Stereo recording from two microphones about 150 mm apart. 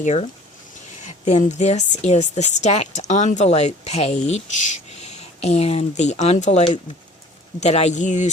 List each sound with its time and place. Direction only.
0.0 s speech: 50° left (ahead or behind)